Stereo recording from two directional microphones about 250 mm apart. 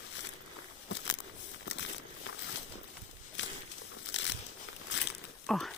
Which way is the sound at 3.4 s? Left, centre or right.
Left.